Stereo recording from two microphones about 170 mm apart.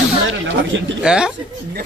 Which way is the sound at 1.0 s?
5° right (ahead or behind).